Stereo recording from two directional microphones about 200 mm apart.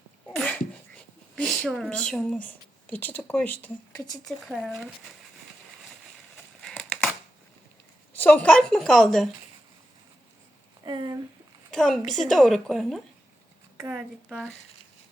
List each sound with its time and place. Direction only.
0.3 s sneeze: 10° left (ahead or behind)
0.9 s a woman's voice: 5° left (ahead or behind)
6.6 s crumpling: 5° left (ahead or behind)
8.1 s a woman's voice: 10° left (ahead or behind)
10.8 s a sound: 20° right (ahead or behind)
11.7 s a woman's voice: centre (ahead or behind)